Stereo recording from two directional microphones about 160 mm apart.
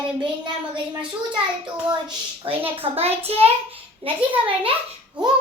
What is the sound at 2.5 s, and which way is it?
A child's voice, 35° right (ahead or behind).